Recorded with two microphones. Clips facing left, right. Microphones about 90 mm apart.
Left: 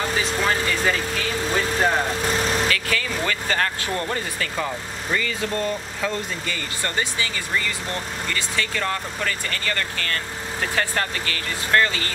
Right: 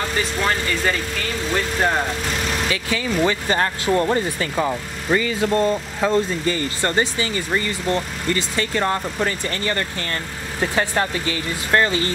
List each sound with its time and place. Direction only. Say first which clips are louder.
0.4 s speech: right 1 dB; centre (ahead or behind)
2.7 s speech: right 2 dB; 20° right (ahead or behind)